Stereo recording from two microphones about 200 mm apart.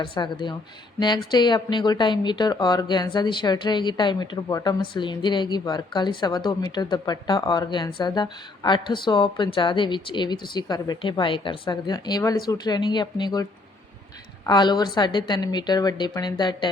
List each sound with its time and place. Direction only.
0.0 s speech: 25° left (ahead or behind)